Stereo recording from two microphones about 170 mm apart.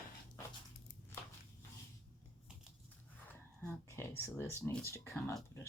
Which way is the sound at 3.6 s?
15° left (ahead or behind).